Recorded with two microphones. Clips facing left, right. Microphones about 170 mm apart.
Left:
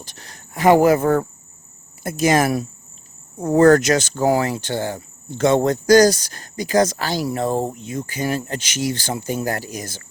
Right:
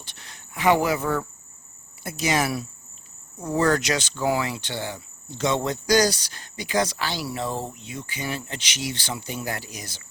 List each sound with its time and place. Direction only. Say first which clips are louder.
0.0 s speech: left 6 dB; 40° left (ahead or behind)